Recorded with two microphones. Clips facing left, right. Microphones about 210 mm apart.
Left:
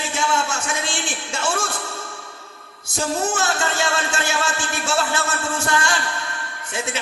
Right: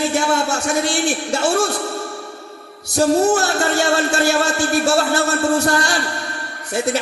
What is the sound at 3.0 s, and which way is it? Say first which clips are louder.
A man's voice: right 8 dB; 40° right (ahead or behind).